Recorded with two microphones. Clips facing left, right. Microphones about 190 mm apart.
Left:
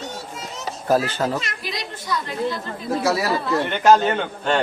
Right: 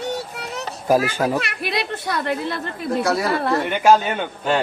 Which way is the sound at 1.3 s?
65° right (ahead or behind).